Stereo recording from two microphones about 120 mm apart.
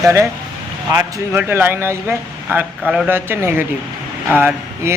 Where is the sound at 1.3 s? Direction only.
15° right (ahead or behind).